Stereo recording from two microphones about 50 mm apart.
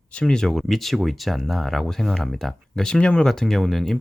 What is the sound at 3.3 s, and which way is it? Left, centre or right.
Speech, centre.